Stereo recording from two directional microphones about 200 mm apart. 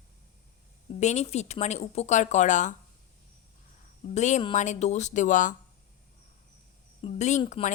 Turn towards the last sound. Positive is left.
turn(degrees=35)  # may be behind; listen again after turning